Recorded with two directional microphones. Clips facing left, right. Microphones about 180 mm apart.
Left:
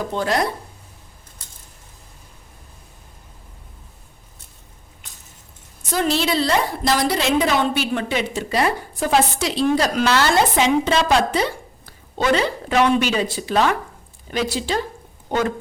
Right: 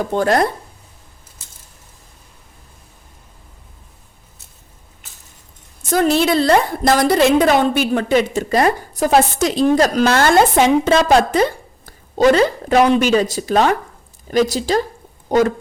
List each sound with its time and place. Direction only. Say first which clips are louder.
0.1 s a woman's voice: right 6 dB; 50° right (ahead or behind)
5.0 s a sound: even; 5° right (ahead or behind)
5.9 s a woman's voice: right 6 dB; 50° right (ahead or behind)